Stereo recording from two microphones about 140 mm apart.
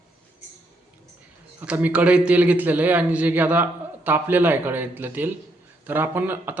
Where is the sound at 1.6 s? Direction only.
10° right (ahead or behind).